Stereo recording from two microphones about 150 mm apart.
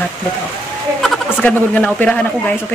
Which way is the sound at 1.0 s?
5° left (ahead or behind).